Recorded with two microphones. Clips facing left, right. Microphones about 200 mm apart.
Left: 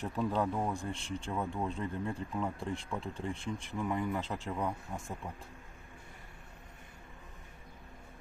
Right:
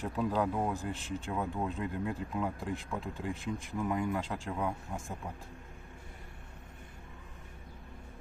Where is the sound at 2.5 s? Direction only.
30° left (ahead or behind).